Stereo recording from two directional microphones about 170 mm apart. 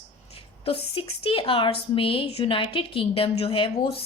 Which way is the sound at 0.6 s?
35° left (ahead or behind).